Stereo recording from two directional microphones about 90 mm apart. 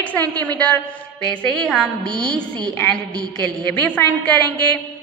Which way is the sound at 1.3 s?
5° left (ahead or behind).